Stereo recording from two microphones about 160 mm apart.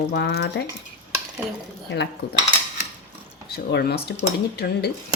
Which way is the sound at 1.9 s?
90° left.